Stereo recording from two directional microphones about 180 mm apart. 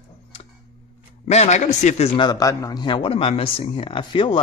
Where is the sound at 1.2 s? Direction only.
40° left (ahead or behind).